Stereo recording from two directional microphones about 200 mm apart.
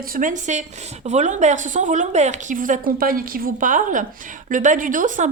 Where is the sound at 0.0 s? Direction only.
45° right (ahead or behind).